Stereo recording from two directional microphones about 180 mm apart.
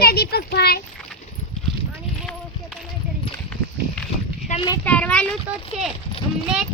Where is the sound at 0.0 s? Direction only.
60° left (ahead or behind).